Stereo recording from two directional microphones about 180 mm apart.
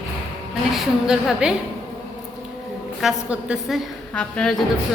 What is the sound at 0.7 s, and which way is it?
Speech, centre (ahead or behind).